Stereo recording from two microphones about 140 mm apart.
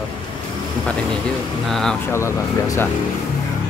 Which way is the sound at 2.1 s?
20° left (ahead or behind).